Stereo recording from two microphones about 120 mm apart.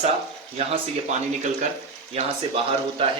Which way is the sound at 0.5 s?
65° right (ahead or behind).